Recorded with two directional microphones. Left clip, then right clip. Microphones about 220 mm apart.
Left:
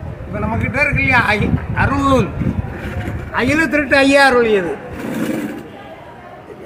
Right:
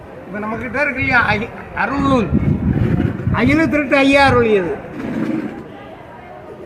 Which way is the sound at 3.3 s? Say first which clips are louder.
Left 1 dB; 5° left (ahead or behind).